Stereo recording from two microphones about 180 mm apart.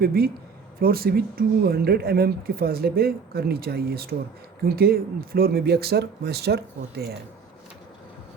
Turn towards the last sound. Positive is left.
turn(degrees=-65)  # may be behind; listen again after turning